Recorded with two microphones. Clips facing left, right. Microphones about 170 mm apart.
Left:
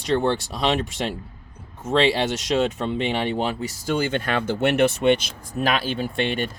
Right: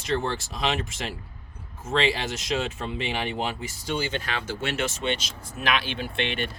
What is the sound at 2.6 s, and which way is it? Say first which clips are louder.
Speech: left 7 dB; 40° left (ahead or behind).